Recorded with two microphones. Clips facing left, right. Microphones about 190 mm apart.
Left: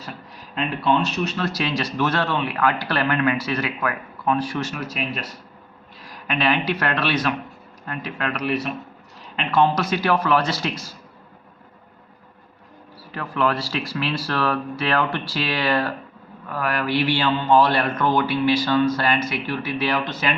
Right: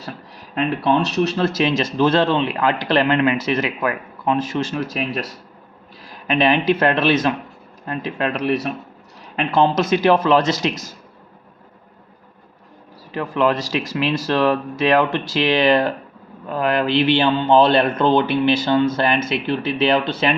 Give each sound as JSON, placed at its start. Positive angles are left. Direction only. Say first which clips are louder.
{"t": 1.4, "sound": "speech", "louder": "right 6 dB", "side_deg": -25}
{"t": 6.2, "sound": "speech", "louder": "right 5 dB", "side_deg": -20}
{"t": 9.5, "sound": "speech", "louder": "right 3 dB", "side_deg": -25}
{"t": 13.1, "sound": "speech", "louder": "right 4 dB", "side_deg": -20}